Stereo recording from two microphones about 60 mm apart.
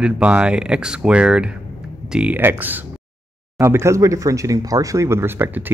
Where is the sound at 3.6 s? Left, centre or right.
Right.